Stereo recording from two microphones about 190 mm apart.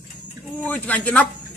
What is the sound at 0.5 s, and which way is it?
Speech, 10° left (ahead or behind).